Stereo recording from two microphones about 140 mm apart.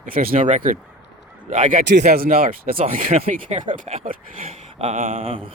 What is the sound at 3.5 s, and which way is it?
Speech, 70° right (ahead or behind).